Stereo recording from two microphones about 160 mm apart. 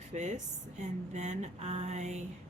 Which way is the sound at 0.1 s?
45° right (ahead or behind).